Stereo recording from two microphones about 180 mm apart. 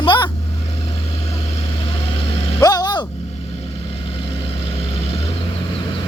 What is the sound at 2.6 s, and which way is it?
Vehicle, 20° left (ahead or behind).